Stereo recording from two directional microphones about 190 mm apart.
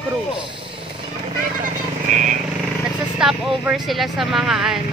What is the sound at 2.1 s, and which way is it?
Speech, 40° right (ahead or behind).